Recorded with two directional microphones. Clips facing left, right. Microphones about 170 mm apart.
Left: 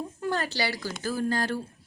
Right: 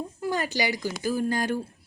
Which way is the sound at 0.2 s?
10° right (ahead or behind).